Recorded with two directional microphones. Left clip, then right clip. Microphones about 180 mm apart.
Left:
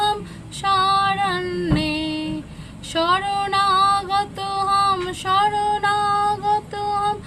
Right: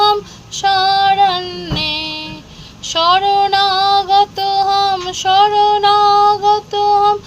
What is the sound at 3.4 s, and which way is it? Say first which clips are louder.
Child singing: right 5 dB; 5° left (ahead or behind).